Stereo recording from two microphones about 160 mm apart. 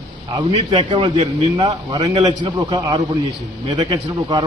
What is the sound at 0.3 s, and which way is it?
A man's voice, 25° right (ahead or behind).